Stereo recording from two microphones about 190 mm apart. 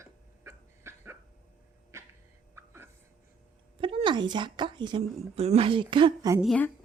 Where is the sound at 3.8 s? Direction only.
25° right (ahead or behind).